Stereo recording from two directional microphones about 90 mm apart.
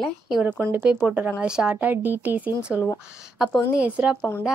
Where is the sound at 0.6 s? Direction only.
20° right (ahead or behind).